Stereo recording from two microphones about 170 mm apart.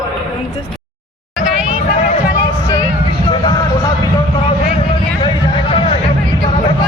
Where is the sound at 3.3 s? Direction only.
25° left (ahead or behind).